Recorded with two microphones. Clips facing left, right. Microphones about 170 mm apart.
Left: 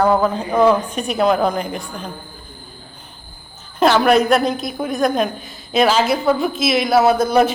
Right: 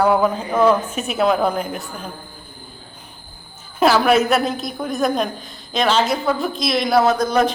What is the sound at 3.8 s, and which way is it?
A woman's voice, 5° right (ahead or behind).